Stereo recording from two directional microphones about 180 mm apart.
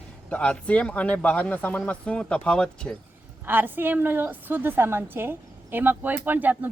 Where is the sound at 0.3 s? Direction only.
5° left (ahead or behind).